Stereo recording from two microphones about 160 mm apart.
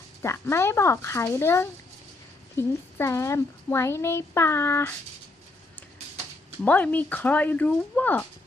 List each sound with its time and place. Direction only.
0.2 s a woman's voice: 15° left (ahead or behind)
6.7 s a woman's voice: 10° left (ahead or behind)